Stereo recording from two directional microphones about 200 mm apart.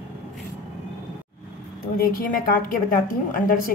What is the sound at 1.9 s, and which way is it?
A woman's voice, 45° left (ahead or behind).